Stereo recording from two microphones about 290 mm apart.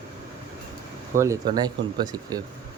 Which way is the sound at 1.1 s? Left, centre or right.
Centre.